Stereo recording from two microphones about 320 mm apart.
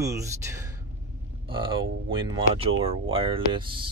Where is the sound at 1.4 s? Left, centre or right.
Centre.